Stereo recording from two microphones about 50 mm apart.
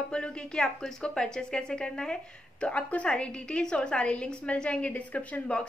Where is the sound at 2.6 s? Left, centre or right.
Left.